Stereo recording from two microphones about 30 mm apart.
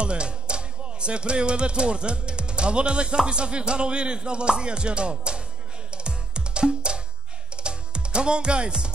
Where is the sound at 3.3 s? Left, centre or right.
Right.